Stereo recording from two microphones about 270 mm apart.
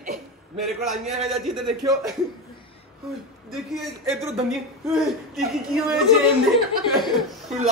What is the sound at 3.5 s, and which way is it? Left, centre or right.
Speech, centre.